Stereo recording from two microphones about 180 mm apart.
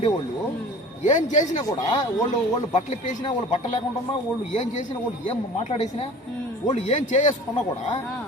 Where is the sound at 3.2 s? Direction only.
25° left (ahead or behind).